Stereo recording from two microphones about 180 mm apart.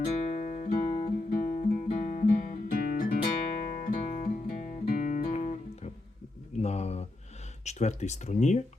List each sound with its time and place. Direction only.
0.2 s music: 40° left (ahead or behind)
0.9 s guitar: 40° left (ahead or behind)
3.6 s music: 45° left (ahead or behind)
6.6 s a sound: 35° left (ahead or behind)
7.6 s speech: 40° left (ahead or behind)